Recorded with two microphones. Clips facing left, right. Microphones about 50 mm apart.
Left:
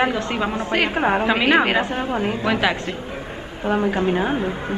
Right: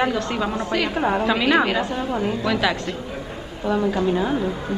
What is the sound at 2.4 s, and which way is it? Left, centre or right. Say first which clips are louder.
Speech: left 2 dB; left.